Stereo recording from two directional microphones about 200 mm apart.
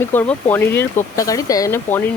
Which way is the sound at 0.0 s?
10° left (ahead or behind).